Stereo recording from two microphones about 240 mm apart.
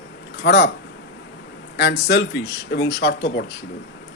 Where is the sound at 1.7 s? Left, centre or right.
Left.